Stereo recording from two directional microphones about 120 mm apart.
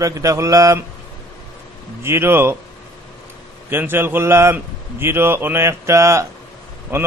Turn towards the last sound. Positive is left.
turn(degrees=-20)  # may be behind; listen again after turning